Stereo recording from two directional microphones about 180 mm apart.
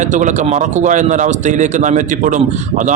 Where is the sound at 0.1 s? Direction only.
45° right (ahead or behind).